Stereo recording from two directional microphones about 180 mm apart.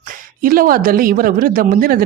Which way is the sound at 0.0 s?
50° right (ahead or behind).